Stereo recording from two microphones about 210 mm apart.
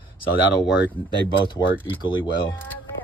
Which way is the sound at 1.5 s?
25° left (ahead or behind).